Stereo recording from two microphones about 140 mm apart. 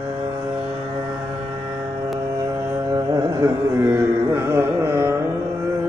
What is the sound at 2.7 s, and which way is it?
Carnatic music, 25° right (ahead or behind).